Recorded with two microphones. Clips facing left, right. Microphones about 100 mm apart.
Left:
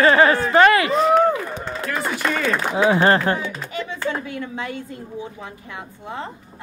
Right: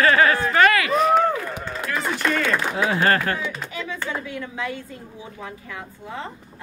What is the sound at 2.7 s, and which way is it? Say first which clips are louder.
Speech: left 6 dB; 20° left (ahead or behind).